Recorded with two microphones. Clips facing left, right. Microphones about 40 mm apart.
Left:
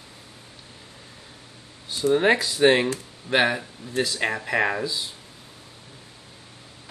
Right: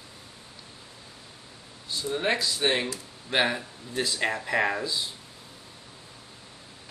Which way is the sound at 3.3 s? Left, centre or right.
Centre.